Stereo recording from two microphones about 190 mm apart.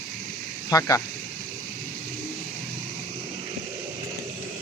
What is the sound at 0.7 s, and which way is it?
Speech, 20° left (ahead or behind).